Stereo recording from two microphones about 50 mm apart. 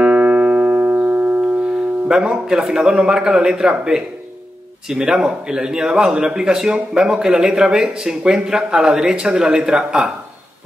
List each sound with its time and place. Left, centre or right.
0.0 s music: right
2.0 s a man's voice: centre